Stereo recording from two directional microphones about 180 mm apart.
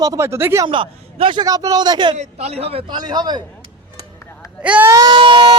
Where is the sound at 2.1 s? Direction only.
35° right (ahead or behind).